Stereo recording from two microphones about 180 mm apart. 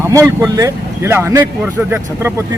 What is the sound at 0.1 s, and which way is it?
Speech, 20° right (ahead or behind).